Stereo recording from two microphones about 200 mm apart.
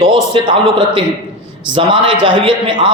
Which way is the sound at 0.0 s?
25° right (ahead or behind).